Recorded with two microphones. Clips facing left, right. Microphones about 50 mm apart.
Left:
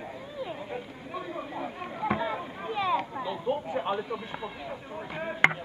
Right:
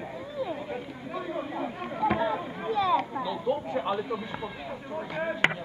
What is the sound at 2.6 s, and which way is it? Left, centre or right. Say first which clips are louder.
Speech: right 3 dB; left.